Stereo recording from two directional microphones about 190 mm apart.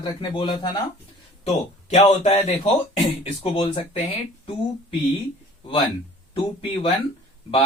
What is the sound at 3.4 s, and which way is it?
Speech, 30° left (ahead or behind).